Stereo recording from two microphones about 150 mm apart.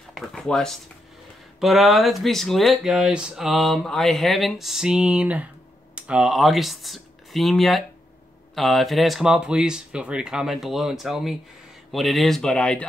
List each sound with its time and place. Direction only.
0.1 s speech: centre (ahead or behind)